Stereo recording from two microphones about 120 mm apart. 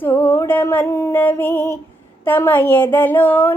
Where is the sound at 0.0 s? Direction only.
20° left (ahead or behind).